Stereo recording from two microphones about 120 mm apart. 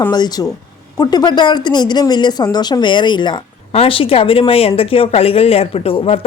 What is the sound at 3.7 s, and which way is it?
Speech, 50° left (ahead or behind).